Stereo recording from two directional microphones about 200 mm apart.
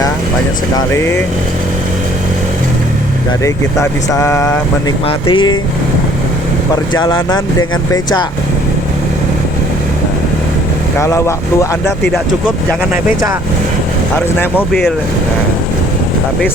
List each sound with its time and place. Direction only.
0.8 s speech: 10° left (ahead or behind)
3.4 s speech: 15° left (ahead or behind)
6.9 s speech: 20° left (ahead or behind)
10.9 s speech: 15° left (ahead or behind)
14.2 s speech: 10° left (ahead or behind)